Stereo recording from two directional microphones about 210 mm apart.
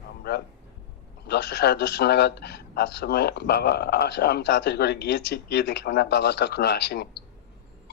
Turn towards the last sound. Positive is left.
turn(degrees=50)  # may be behind; listen again after turning